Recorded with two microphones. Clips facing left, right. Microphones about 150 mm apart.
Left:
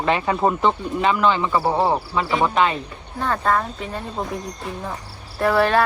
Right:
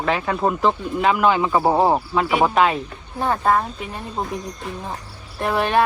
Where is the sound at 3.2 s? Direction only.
15° right (ahead or behind).